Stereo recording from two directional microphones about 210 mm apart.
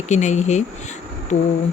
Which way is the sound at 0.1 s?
35° left (ahead or behind).